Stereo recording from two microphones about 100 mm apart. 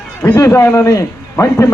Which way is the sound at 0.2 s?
15° left (ahead or behind).